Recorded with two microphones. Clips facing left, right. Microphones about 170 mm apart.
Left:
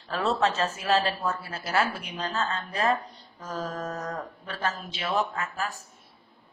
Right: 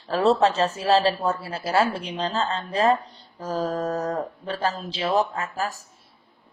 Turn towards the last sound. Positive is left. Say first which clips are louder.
# right 4 dB
turn(degrees=-35)  # may be behind; listen again after turning